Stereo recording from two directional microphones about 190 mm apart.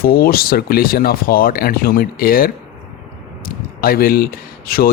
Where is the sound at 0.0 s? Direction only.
55° left (ahead or behind).